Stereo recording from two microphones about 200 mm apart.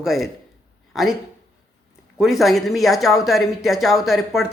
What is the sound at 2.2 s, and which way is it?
Speech, centre (ahead or behind).